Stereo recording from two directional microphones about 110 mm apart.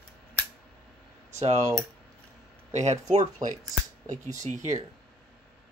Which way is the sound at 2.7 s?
90° right.